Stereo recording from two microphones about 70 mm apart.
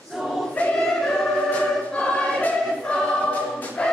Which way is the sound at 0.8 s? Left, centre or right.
Centre.